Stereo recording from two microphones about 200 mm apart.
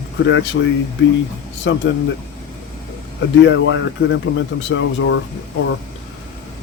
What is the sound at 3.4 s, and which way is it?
Speech, 70° left (ahead or behind).